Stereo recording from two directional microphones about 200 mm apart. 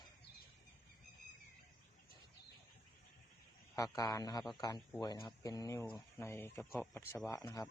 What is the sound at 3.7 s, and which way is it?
A man's voice, 15° left (ahead or behind).